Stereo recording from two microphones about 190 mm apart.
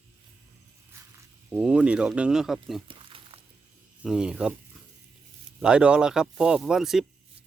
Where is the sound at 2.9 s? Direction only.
25° right (ahead or behind).